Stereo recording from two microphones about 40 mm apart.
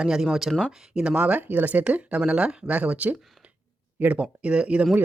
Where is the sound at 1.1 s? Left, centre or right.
Right.